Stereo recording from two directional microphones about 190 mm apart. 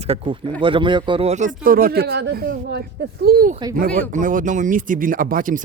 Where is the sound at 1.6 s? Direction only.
50° right (ahead or behind).